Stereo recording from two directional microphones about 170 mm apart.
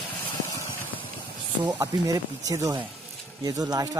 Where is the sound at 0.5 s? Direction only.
30° left (ahead or behind).